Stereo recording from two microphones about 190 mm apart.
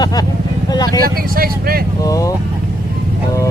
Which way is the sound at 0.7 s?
20° left (ahead or behind).